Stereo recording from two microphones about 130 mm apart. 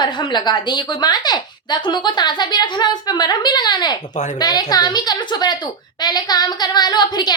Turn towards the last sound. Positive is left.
turn(degrees=35)  # may be behind; listen again after turning